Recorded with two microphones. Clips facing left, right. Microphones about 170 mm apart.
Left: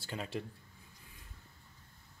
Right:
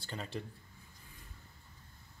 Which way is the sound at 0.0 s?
5° left (ahead or behind).